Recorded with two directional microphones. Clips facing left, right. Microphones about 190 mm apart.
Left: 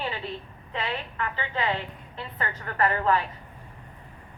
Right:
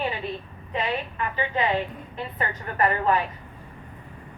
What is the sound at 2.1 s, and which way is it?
Speech, 20° right (ahead or behind).